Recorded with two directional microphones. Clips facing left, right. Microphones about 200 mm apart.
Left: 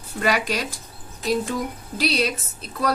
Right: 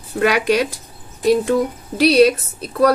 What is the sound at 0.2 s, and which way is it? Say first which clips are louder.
A woman's voice: right 7 dB; 65° right (ahead or behind).